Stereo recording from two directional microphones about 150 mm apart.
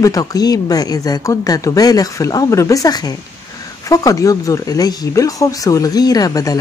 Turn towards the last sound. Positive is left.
turn(degrees=25)  # may be behind; listen again after turning